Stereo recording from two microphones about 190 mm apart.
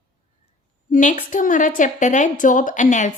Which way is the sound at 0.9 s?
45° left (ahead or behind).